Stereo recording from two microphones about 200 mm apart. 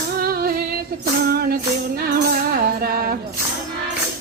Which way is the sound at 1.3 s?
50° right (ahead or behind).